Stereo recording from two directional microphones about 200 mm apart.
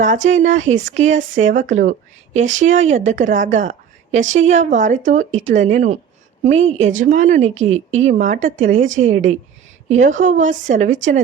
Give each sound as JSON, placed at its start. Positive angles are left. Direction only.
{"t": 0.3, "sound": "a woman's voice", "side_deg": -35}
{"t": 8.7, "sound": "a woman's voice", "side_deg": -75}
{"t": 9.9, "sound": "a woman's voice", "side_deg": -40}